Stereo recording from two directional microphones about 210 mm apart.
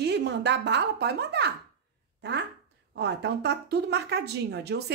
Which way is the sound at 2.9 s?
55° right (ahead or behind).